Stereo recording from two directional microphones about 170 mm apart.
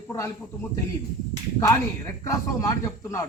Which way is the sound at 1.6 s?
20° left (ahead or behind).